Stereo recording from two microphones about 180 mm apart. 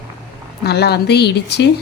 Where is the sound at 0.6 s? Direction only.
65° left (ahead or behind).